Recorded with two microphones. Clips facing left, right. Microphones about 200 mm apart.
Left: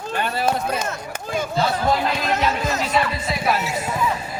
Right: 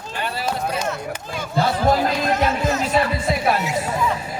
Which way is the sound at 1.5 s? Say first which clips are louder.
Right 3 dB; 45° right (ahead or behind).